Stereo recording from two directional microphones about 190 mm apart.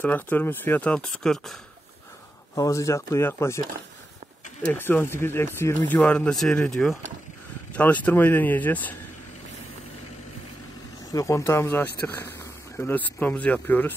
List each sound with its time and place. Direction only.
0.0 s speech: 10° left (ahead or behind)
2.5 s speech: 15° left (ahead or behind)
4.6 s speech: 10° left (ahead or behind)
11.1 s speech: 15° left (ahead or behind)